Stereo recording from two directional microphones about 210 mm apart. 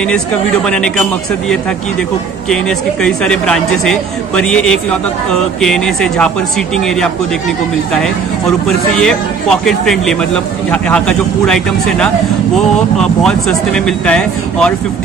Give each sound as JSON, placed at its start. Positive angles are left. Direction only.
{"t": 0.7, "sound": "a man's voice", "side_deg": 5}
{"t": 2.5, "sound": "a man's voice", "side_deg": 5}
{"t": 8.6, "sound": "a man's voice", "side_deg": 0}